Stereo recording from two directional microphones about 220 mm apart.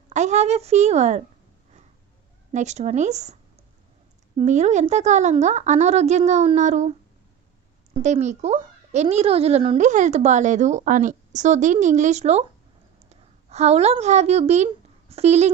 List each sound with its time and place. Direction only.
0.1 s a child's voice: 30° right (ahead or behind)
2.5 s a child's voice: 30° right (ahead or behind)
4.4 s a child's voice: 30° right (ahead or behind)